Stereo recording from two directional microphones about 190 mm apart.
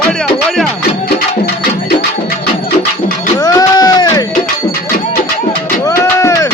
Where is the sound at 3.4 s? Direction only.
20° left (ahead or behind).